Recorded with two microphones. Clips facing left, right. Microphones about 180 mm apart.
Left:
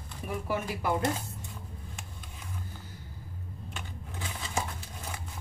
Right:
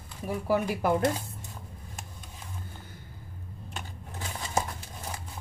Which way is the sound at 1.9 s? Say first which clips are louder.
Right 1 dB; 40° right (ahead or behind).